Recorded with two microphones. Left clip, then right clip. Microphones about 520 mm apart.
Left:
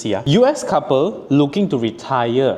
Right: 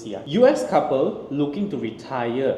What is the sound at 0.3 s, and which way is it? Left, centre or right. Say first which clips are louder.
Speech: left 2 dB; left.